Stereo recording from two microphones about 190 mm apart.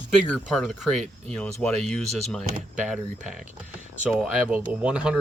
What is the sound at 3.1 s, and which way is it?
Speech, 40° right (ahead or behind).